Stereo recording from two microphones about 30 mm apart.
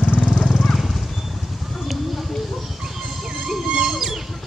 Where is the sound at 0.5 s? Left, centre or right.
Centre.